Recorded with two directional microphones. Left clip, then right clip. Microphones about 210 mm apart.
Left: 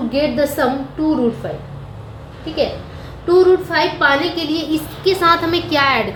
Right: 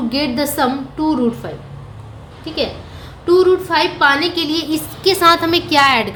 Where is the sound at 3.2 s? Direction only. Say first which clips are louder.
Even; 30° right (ahead or behind).